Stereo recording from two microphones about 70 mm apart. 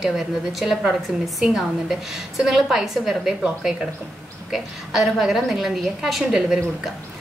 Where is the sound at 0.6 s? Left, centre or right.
Centre.